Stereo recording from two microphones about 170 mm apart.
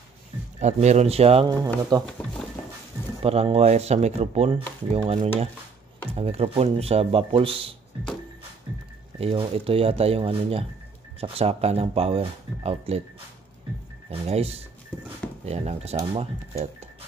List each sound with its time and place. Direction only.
0.6 s speech: 40° right (ahead or behind)
1.6 s speech: 20° right (ahead or behind)
3.2 s speech: 35° right (ahead or behind)
9.2 s speech: 35° right (ahead or behind)
14.2 s speech: 35° right (ahead or behind)